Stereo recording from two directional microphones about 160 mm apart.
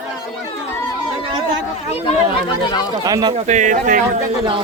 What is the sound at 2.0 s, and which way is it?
Speech, 30° left (ahead or behind).